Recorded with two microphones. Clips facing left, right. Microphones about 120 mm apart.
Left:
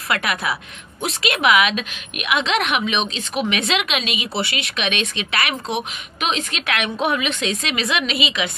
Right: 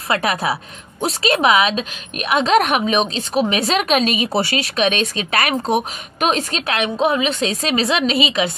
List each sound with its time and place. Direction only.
0.1 s a woman's voice: 35° right (ahead or behind)